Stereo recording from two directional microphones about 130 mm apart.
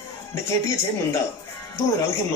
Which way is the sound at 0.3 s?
20° left (ahead or behind).